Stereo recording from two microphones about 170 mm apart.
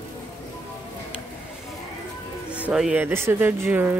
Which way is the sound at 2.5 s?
5° right (ahead or behind).